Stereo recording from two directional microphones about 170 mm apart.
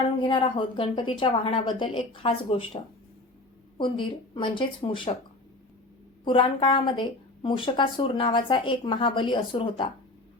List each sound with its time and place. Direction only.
0.2 s a woman's voice: 30° left (ahead or behind)
3.8 s a woman's voice: 30° left (ahead or behind)
6.2 s a woman's voice: 30° left (ahead or behind)